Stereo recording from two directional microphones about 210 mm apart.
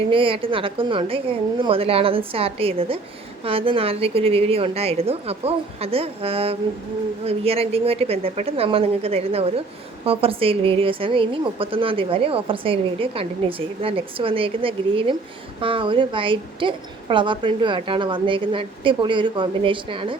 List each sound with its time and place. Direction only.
0.1 s a woman's voice: 25° right (ahead or behind)